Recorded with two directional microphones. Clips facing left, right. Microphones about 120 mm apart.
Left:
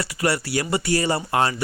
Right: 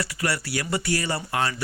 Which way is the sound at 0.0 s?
25° left (ahead or behind).